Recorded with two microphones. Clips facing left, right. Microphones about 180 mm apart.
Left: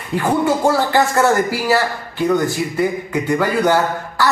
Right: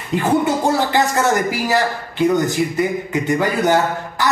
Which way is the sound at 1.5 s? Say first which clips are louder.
Left 1 dB; 20° right (ahead or behind).